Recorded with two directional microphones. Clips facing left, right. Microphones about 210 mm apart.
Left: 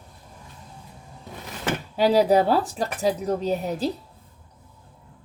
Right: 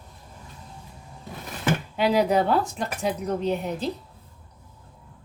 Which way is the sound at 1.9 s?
35° left (ahead or behind).